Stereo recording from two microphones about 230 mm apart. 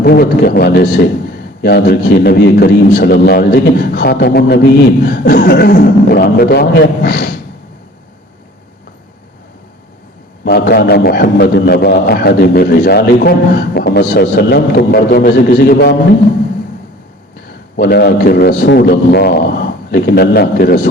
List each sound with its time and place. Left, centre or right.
0.0 s a man's voice: left
10.4 s a man's voice: left
17.7 s a man's voice: left